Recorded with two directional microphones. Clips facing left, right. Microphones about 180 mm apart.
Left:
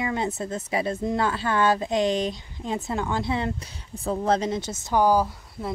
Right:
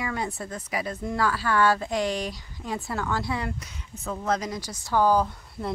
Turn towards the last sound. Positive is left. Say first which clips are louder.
# left 1 dB
turn(degrees=5)  # may be behind; listen again after turning